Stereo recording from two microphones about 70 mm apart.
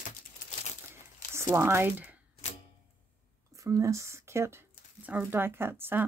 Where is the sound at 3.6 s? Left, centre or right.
Right.